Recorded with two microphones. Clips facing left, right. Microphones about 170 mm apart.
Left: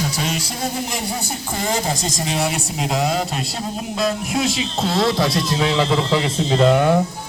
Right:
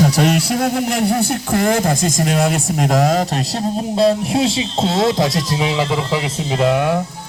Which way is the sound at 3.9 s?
30° right (ahead or behind).